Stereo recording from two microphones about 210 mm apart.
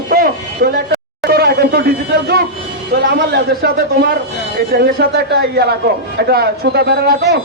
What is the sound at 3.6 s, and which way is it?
Speech, 50° right (ahead or behind).